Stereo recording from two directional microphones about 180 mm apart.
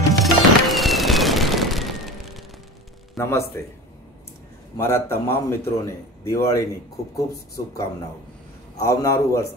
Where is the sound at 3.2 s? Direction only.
15° left (ahead or behind).